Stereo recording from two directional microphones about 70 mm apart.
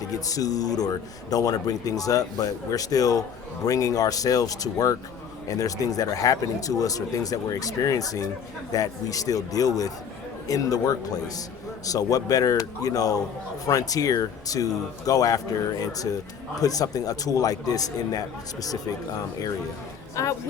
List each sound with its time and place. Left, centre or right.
0.1 s speech: left
20.2 s speech: left